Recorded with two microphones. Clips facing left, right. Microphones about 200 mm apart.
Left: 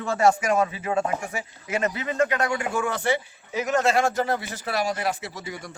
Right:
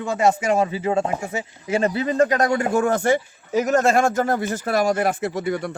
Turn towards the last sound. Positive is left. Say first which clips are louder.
# right 12 dB
turn(degrees=-60)  # may be behind; listen again after turning